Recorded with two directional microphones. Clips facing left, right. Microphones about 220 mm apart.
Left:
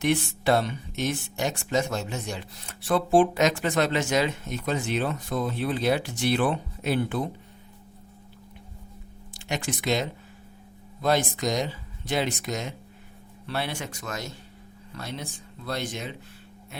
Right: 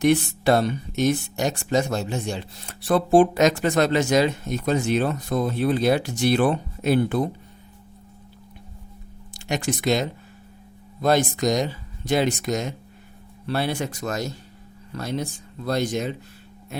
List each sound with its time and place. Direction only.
0.0 s speech: 40° right (ahead or behind)
9.3 s speech: 40° right (ahead or behind)